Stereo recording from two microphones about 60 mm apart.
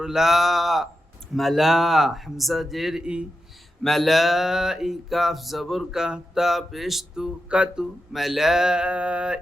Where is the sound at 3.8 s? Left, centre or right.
Centre.